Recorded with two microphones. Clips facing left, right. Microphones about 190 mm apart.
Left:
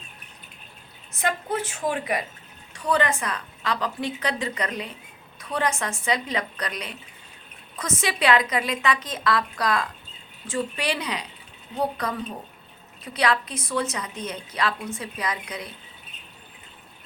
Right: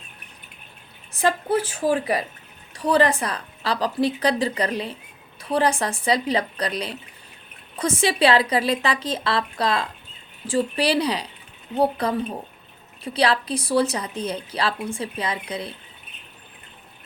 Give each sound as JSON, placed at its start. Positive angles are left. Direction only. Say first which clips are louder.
{"t": 1.1, "sound": "a woman's voice", "louder": "right 6 dB", "side_deg": -30}